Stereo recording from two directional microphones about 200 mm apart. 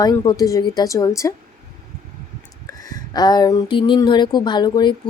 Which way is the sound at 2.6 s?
20° left (ahead or behind).